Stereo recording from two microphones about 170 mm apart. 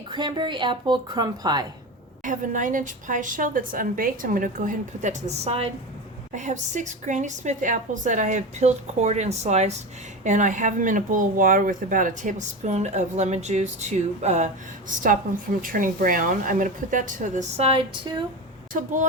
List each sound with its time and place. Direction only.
0.1 s a woman's voice: 25° right (ahead or behind)
2.2 s speech: 50° right (ahead or behind)
6.3 s speech: 45° right (ahead or behind); by 18.3 s 30° right (ahead or behind)
18.7 s speech: 50° right (ahead or behind)